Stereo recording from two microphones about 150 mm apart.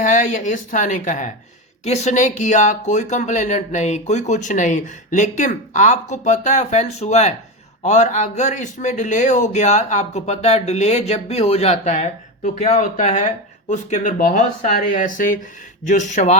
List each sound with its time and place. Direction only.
0.0 s a man's voice: 55° left (ahead or behind)